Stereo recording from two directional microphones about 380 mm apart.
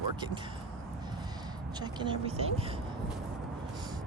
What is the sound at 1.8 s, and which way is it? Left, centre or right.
Speech, centre.